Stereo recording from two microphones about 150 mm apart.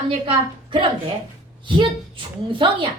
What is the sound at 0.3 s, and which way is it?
A woman's voice, 35° right (ahead or behind).